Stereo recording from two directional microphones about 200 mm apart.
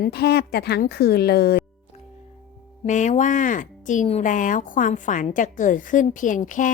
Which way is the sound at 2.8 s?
35° left (ahead or behind).